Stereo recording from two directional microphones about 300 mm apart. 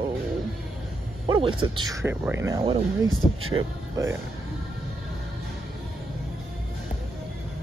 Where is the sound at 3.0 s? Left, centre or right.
Right.